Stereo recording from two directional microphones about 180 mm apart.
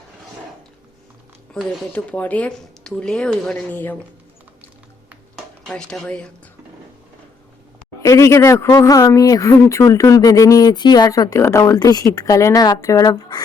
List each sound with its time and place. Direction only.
1.5 s speech: 5° left (ahead or behind)
5.6 s speech: 5° left (ahead or behind)
8.0 s speech: 15° left (ahead or behind)